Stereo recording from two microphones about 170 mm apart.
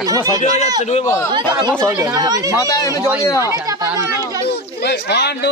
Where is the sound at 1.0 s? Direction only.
20° left (ahead or behind).